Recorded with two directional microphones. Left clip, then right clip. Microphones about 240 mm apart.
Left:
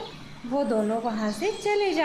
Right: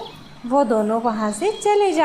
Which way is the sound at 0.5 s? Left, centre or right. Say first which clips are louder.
Right 8 dB; centre.